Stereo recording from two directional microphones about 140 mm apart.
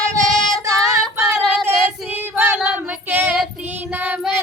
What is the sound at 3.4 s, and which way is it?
Child singing, 10° right (ahead or behind).